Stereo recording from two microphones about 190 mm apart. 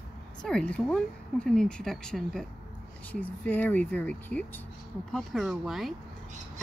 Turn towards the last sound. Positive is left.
turn(degrees=0)  # may be behind; listen again after turning